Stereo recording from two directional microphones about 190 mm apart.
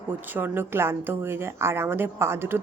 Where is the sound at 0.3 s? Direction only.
10° right (ahead or behind).